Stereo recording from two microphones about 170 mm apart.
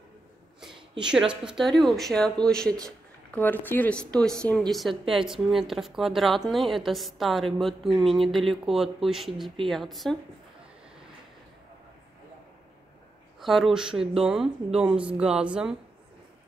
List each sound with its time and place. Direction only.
1.0 s a woman's voice: 5° right (ahead or behind)
13.4 s a woman's voice: centre (ahead or behind)